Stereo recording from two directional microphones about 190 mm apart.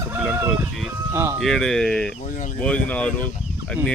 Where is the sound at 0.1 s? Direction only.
5° right (ahead or behind).